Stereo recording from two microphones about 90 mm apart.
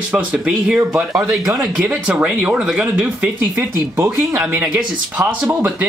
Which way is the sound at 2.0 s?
15° right (ahead or behind).